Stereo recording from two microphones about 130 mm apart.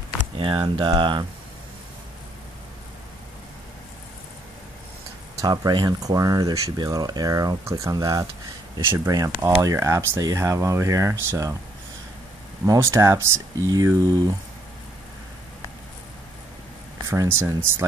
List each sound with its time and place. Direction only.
0.4 s speech: 40° right (ahead or behind)
5.4 s speech: 30° right (ahead or behind)
12.6 s speech: 25° right (ahead or behind)
17.1 s speech: 20° right (ahead or behind)